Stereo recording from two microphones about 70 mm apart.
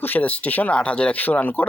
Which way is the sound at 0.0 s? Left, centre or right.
Left.